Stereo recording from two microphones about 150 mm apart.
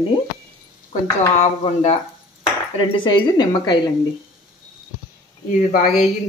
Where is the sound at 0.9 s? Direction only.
45° left (ahead or behind).